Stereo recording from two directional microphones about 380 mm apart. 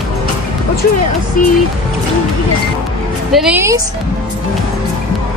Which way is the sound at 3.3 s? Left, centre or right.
Centre.